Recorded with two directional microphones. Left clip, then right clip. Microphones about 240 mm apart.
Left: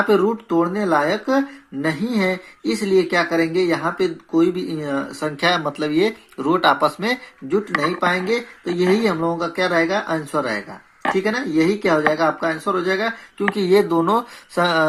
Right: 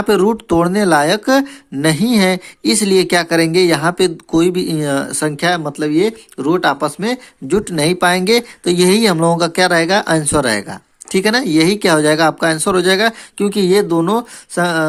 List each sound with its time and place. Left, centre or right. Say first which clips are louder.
0.1 s speech: right 4 dB; right
7.5 s speech: right 4 dB; right